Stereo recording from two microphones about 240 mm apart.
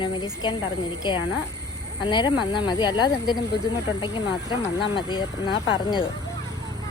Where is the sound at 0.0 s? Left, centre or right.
Centre.